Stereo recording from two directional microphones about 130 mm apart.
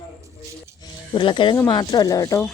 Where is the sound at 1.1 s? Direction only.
40° left (ahead or behind).